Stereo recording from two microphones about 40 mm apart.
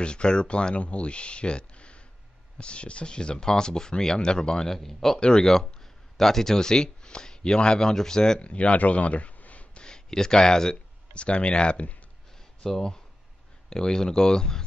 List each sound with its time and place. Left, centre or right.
0.0 s speech: left
8.4 s speech: left
9.8 s speech: centre
11.1 s speech: left
12.6 s speech: centre